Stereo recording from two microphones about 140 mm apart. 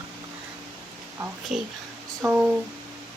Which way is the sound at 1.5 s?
5° right (ahead or behind).